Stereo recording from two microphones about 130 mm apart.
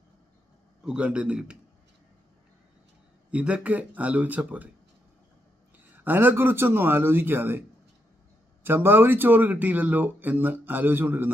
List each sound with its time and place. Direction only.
0.9 s speech: 10° right (ahead or behind)
3.3 s speech: 10° right (ahead or behind)
6.0 s speech: 15° right (ahead or behind)
8.6 s speech: 15° right (ahead or behind)